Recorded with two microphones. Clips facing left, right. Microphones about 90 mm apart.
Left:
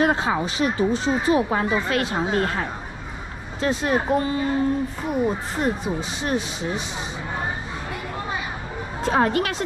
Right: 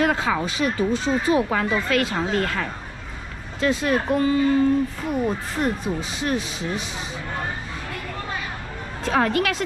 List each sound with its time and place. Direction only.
0.0 s speech: 30° left (ahead or behind)
5.6 s speech: 25° left (ahead or behind)
9.0 s speech: 25° left (ahead or behind)